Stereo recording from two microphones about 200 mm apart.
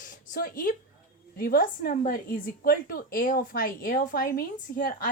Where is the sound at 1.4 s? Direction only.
50° left (ahead or behind).